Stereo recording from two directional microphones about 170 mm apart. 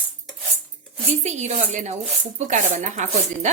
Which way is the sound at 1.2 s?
40° right (ahead or behind).